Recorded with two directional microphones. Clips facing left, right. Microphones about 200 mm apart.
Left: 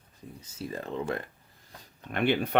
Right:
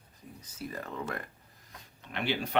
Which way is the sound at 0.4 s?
25° left (ahead or behind).